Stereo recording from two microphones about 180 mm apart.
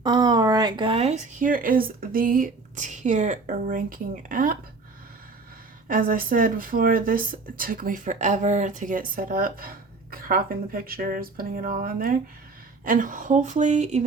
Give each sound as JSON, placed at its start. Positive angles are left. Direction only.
{"t": 0.0, "sound": "speech", "side_deg": -25}
{"t": 5.9, "sound": "speech", "side_deg": -50}